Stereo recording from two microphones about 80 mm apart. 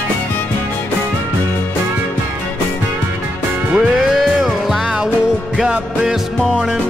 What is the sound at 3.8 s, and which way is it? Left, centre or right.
Music, centre.